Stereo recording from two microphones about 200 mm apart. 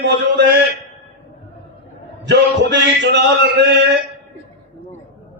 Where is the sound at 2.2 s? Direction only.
60° right (ahead or behind).